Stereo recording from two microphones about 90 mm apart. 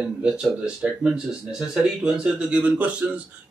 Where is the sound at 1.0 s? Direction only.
5° right (ahead or behind).